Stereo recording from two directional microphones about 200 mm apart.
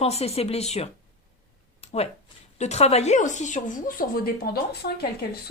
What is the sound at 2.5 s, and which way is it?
Speech, 35° left (ahead or behind).